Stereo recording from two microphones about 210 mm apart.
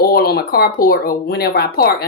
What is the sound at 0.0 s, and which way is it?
A woman's voice, 45° left (ahead or behind).